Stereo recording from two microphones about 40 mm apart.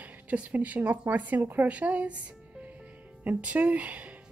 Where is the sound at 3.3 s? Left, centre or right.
Right.